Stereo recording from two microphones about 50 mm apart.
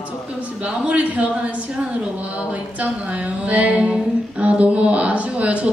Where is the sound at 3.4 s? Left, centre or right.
Right.